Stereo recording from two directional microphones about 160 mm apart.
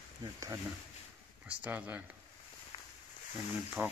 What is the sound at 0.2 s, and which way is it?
Speech, 25° right (ahead or behind).